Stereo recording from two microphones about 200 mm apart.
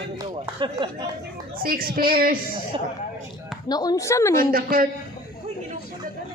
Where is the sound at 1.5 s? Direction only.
50° right (ahead or behind).